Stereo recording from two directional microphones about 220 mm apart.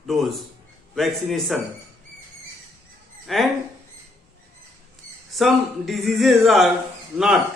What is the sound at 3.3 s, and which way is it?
Speech, centre (ahead or behind).